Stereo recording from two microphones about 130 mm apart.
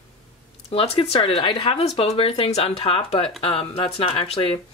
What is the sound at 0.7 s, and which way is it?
Speech, 45° left (ahead or behind).